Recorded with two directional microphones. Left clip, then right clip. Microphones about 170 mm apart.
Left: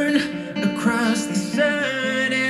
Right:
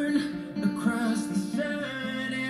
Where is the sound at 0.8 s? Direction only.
20° left (ahead or behind).